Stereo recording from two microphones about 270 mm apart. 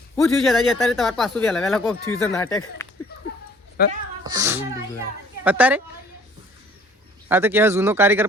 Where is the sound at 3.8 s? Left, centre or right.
Left.